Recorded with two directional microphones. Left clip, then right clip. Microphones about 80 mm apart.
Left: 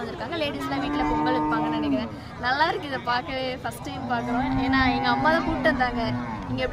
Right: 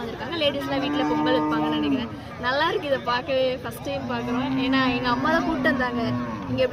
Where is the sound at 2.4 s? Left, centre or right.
Left.